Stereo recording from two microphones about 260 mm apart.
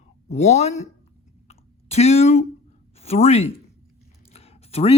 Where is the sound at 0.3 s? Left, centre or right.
Left.